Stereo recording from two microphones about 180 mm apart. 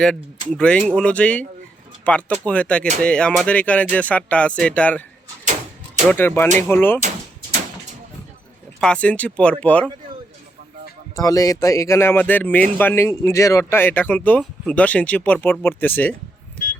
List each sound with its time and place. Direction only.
0.5 s speech: 5° left (ahead or behind)
6.1 s speech: 10° left (ahead or behind)
8.8 s speech: 5° left (ahead or behind)
11.1 s speech: 20° left (ahead or behind)